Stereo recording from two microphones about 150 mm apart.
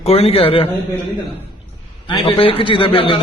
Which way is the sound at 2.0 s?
35° left (ahead or behind).